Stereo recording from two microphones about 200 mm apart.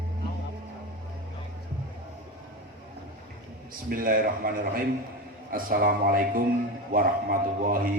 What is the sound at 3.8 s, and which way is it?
A man's voice, 45° right (ahead or behind).